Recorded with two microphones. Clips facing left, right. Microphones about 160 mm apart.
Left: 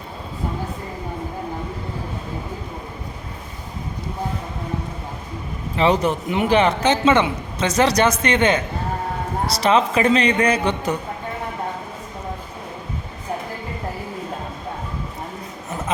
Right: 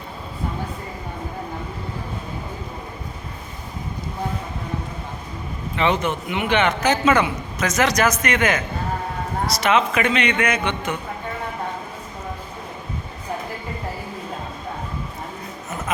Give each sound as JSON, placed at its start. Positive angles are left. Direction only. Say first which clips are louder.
{"t": 5.7, "sound": "a man's voice", "louder": "left 3 dB", "side_deg": 35}